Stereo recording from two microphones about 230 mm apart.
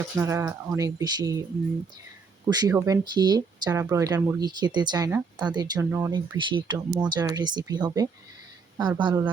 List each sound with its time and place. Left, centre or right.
0.2 s speech: centre
2.5 s a woman's voice: centre